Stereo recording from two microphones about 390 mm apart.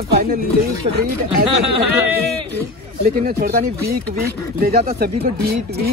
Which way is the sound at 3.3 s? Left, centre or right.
Right.